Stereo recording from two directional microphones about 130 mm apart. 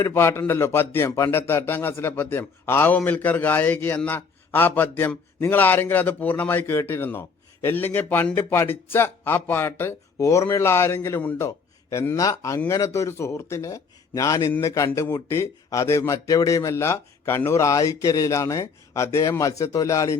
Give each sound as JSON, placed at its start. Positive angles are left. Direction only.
{"t": 0.0, "sound": "a man's voice", "side_deg": 20}